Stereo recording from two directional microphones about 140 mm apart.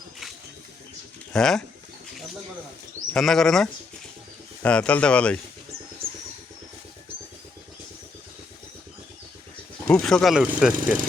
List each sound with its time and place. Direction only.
1.3 s speech: 5° left (ahead or behind)
3.1 s speech: centre (ahead or behind)
6.0 s vehicle: 40° right (ahead or behind)
9.9 s speech: 5° left (ahead or behind)